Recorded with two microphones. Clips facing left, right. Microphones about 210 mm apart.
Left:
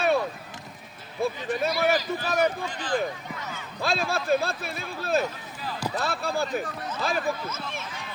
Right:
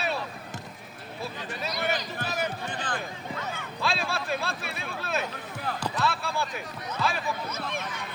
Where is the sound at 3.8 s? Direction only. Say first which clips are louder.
Left 4 dB; 40° left (ahead or behind).